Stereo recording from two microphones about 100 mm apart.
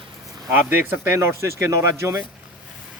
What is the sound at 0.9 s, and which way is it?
Speech, 25° right (ahead or behind).